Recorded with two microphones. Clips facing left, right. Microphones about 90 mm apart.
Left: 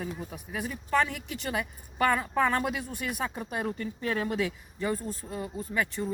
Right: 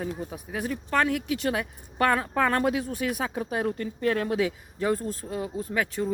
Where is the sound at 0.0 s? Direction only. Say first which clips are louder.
Right 4 dB; 45° right (ahead or behind).